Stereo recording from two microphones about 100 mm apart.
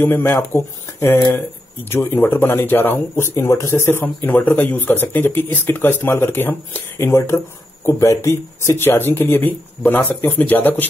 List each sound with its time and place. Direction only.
0.0 s speech: 20° left (ahead or behind)